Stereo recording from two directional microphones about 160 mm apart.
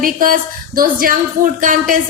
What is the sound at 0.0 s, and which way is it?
A man's voice, 60° right (ahead or behind).